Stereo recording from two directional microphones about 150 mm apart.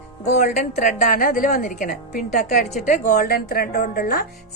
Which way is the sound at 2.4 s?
55° left (ahead or behind).